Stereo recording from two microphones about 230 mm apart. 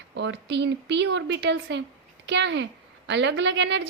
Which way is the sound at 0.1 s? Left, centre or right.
Right.